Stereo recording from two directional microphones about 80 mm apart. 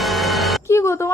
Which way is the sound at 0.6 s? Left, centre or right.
Left.